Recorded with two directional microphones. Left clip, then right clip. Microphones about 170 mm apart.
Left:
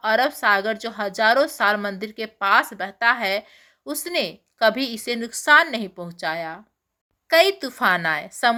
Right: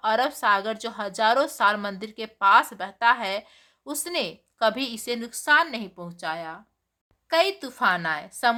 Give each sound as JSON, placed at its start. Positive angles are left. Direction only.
{"t": 0.0, "sound": "a woman's voice", "side_deg": 5}